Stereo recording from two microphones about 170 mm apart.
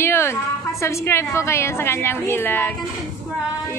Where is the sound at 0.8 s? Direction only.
15° left (ahead or behind).